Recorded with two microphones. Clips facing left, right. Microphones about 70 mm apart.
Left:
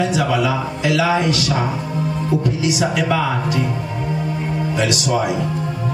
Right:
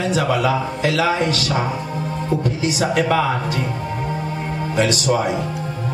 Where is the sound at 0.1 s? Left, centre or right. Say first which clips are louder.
Even; right.